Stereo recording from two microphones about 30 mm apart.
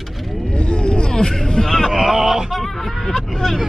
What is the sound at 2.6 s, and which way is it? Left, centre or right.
Vehicle, centre.